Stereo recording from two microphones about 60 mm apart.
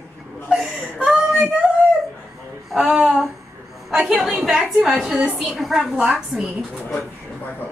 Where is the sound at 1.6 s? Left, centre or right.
Centre.